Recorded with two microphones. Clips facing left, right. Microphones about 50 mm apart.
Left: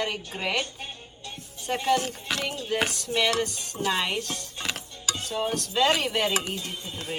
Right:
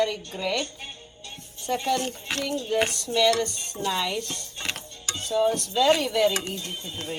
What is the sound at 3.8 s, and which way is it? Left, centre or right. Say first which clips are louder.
Music: even; left.